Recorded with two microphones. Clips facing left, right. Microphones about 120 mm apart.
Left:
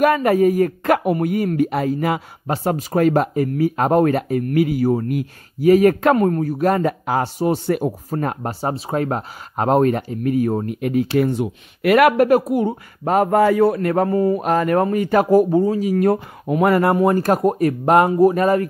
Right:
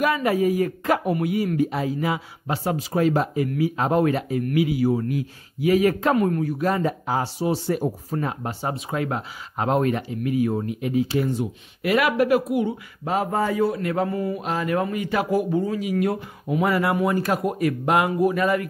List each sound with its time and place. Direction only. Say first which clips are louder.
0.0 s speech: left 6 dB; 50° left (ahead or behind)
6.1 s speech: left 4 dB; 45° left (ahead or behind); by 7.9 s 65° left (ahead or behind)
8.1 s speech: left 4 dB; 50° left (ahead or behind)
13.4 s speech: left 7 dB; 65° left (ahead or behind); by 14.4 s 40° left (ahead or behind)
14.4 s speech: left 7 dB; 55° left (ahead or behind)